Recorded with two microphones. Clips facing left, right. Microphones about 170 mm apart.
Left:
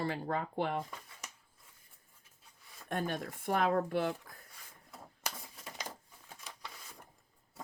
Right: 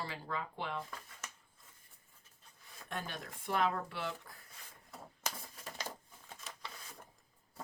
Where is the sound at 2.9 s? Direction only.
50° left (ahead or behind).